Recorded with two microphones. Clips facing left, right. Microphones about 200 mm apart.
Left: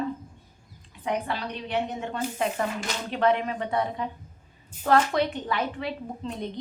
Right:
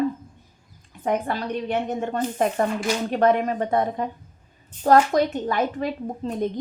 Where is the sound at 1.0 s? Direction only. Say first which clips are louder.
Right 5 dB; 45° right (ahead or behind).